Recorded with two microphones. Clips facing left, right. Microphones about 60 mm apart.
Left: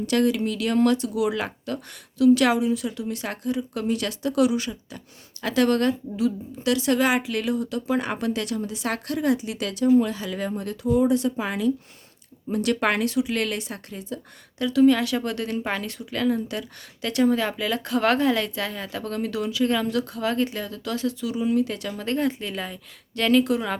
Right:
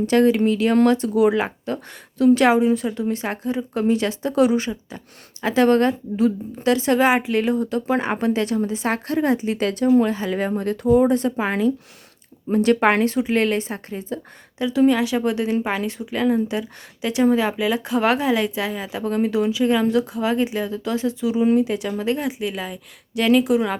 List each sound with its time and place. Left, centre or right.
0.0 s a woman's voice: right
14.6 s a woman's voice: right